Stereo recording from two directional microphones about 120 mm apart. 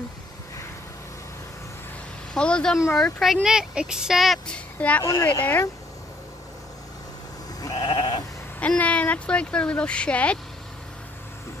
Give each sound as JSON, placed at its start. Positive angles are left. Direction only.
{"t": 2.3, "sound": "speech", "side_deg": 5}
{"t": 4.7, "sound": "speech", "side_deg": 10}
{"t": 5.0, "sound": "speech", "side_deg": 25}
{"t": 7.6, "sound": "sheep", "side_deg": 35}
{"t": 8.5, "sound": "speech", "side_deg": 10}